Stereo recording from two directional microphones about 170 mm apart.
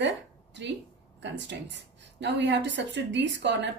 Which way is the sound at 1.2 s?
90° right.